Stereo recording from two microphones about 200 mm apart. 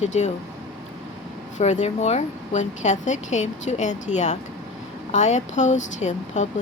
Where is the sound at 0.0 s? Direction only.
35° left (ahead or behind).